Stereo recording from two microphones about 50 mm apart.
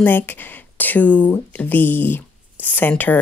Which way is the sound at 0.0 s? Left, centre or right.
Left.